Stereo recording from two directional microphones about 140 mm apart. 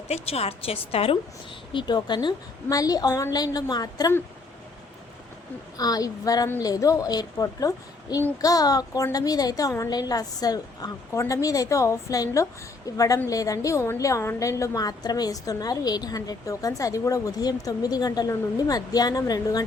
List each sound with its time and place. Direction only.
0.1 s a woman's voice: 45° left (ahead or behind)
1.7 s a woman's voice: 30° left (ahead or behind)
5.7 s a woman's voice: 25° left (ahead or behind)